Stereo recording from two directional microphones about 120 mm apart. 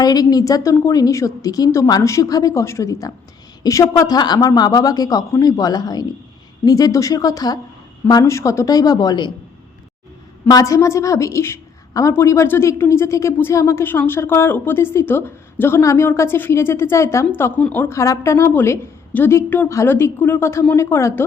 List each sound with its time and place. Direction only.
0.0 s a woman's voice: 35° left (ahead or behind)
10.5 s a woman's voice: 25° left (ahead or behind)
17.6 s a woman's voice: 10° left (ahead or behind)
17.8 s a woman's voice: 25° left (ahead or behind)